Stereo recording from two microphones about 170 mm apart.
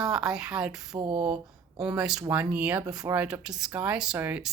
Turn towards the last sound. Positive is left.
turn(degrees=-10)  # may be behind; listen again after turning